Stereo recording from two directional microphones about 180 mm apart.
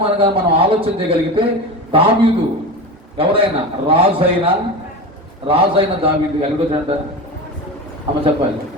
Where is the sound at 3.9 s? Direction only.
30° right (ahead or behind).